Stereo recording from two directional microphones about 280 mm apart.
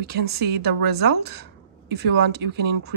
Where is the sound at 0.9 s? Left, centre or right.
Right.